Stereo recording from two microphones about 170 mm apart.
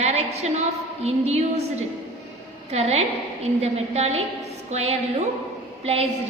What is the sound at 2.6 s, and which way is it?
A woman's voice, 40° right (ahead or behind).